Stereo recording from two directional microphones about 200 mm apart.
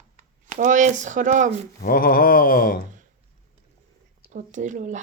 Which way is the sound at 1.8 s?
45° left (ahead or behind).